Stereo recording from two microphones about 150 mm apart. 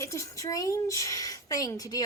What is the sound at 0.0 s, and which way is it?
A woman's voice, 20° left (ahead or behind).